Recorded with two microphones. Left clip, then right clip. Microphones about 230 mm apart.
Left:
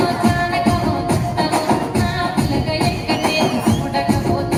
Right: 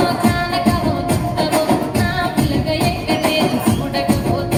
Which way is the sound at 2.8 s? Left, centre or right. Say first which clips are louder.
Right 1 dB; right.